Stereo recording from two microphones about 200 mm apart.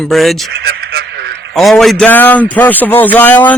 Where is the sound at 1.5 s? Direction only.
Centre (ahead or behind).